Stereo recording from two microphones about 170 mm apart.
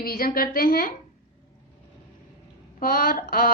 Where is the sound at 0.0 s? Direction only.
60° left (ahead or behind).